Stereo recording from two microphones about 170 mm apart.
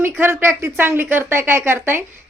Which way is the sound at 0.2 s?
15° right (ahead or behind).